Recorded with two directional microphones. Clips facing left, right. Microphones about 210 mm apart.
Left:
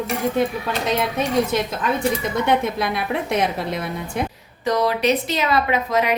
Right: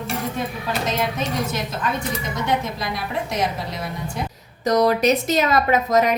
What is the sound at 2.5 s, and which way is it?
A woman's voice, 60° left (ahead or behind).